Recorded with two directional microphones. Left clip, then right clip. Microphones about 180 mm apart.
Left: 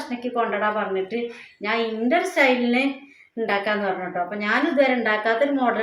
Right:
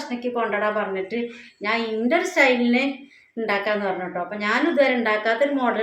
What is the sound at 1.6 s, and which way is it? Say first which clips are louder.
A woman's voice: even; 15° right (ahead or behind).